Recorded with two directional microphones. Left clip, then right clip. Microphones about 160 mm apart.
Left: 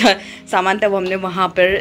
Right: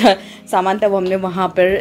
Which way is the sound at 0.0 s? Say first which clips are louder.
Right 1 dB; 15° right (ahead or behind).